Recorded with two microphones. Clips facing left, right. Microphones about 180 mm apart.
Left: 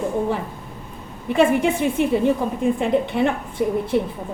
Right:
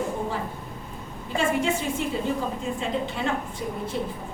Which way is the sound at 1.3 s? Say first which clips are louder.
Left 7 dB; 60° left (ahead or behind).